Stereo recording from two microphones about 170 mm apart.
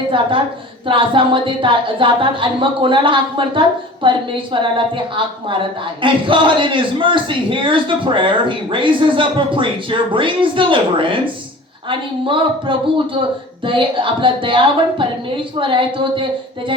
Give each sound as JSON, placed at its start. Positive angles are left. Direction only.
{"t": 0.1, "sound": "a man's voice", "side_deg": -30}
{"t": 6.0, "sound": "a man's voice", "side_deg": -30}